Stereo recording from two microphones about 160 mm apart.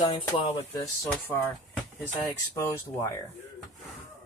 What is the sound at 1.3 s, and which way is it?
Speech, 15° left (ahead or behind).